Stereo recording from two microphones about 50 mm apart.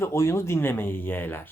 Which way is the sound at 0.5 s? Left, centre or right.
Left.